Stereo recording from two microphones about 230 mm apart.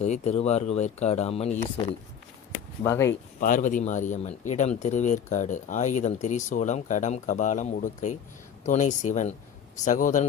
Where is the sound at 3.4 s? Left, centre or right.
Left.